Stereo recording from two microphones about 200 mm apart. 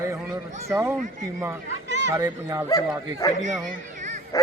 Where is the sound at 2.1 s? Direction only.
15° right (ahead or behind).